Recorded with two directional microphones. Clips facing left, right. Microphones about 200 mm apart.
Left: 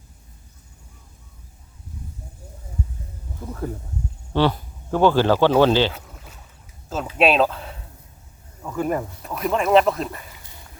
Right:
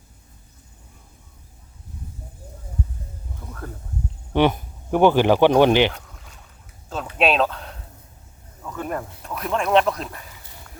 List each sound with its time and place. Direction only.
4.3 s speech: 20° right (ahead or behind)
5.9 s a sound: 5° left (ahead or behind)
7.2 s speech: centre (ahead or behind)